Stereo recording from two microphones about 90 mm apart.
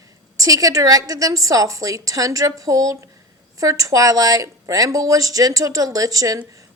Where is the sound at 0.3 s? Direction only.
40° right (ahead or behind).